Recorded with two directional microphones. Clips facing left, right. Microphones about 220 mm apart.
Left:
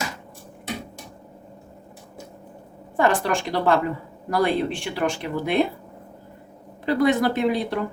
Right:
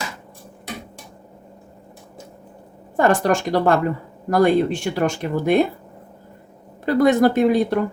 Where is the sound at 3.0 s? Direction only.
45° right (ahead or behind).